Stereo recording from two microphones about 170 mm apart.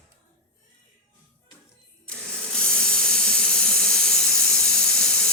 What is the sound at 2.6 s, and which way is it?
Steam, 5° left (ahead or behind).